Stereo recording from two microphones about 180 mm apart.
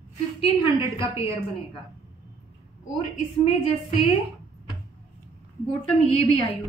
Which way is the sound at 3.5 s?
30° left (ahead or behind).